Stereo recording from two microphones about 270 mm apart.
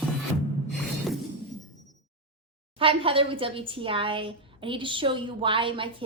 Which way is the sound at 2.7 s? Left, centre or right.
Centre.